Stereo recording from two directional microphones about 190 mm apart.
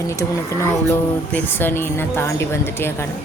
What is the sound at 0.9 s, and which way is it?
Speech, 10° left (ahead or behind).